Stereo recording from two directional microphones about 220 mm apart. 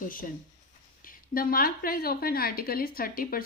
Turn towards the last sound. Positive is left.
turn(degrees=40)  # may be behind; listen again after turning